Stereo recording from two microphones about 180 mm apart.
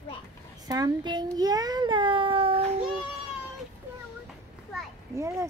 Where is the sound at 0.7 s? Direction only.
20° right (ahead or behind).